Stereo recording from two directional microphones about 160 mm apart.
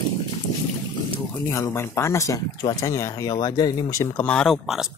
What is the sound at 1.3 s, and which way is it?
Speech, 15° left (ahead or behind).